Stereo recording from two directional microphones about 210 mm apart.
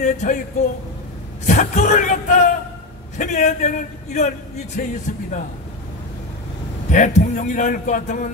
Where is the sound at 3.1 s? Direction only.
35° left (ahead or behind).